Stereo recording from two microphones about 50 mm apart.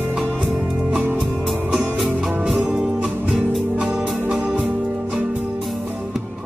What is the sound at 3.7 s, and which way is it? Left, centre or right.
Music, centre.